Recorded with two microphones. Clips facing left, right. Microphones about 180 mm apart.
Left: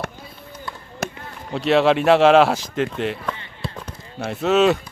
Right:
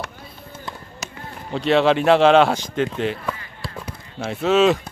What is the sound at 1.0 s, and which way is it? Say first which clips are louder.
Chop: left 9 dB; 55° left (ahead or behind).